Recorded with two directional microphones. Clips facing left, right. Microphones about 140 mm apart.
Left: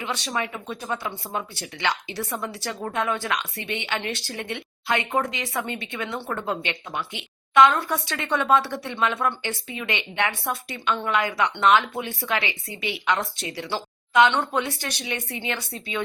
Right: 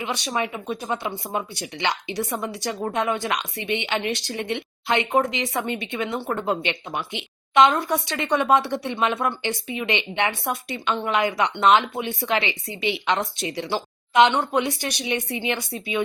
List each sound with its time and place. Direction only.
0.0 s speech: 15° right (ahead or behind)